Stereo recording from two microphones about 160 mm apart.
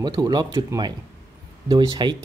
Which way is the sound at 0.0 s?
25° right (ahead or behind).